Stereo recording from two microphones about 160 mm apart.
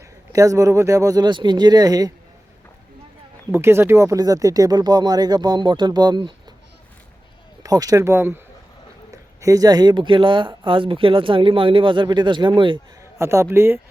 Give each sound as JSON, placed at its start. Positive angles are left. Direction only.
{"t": 0.3, "sound": "speech", "side_deg": -20}
{"t": 3.5, "sound": "speech", "side_deg": -15}
{"t": 7.6, "sound": "speech", "side_deg": -20}
{"t": 9.4, "sound": "speech", "side_deg": -20}
{"t": 13.0, "sound": "a man's voice", "side_deg": -20}